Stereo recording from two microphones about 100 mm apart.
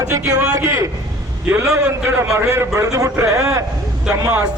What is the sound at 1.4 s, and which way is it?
Speech, 20° right (ahead or behind).